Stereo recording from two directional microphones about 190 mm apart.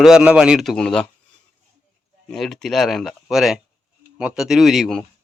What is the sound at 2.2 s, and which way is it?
Speech, centre (ahead or behind).